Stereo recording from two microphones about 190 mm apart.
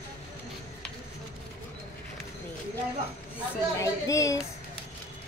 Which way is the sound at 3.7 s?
15° left (ahead or behind).